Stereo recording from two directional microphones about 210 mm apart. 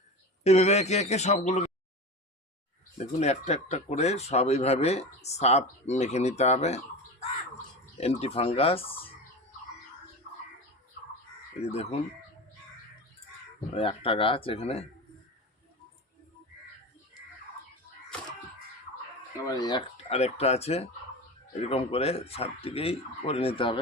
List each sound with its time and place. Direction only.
0.4 s speech: 30° left (ahead or behind)
3.2 s speech: 30° left (ahead or behind)
11.6 s speech: 30° left (ahead or behind)
13.7 s speech: 25° left (ahead or behind)
19.5 s speech: 20° left (ahead or behind)